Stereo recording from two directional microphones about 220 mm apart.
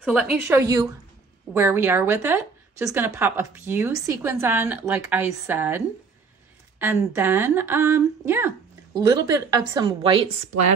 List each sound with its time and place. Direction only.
0.0 s a woman's voice: 5° right (ahead or behind)
0.6 s speech: 15° right (ahead or behind)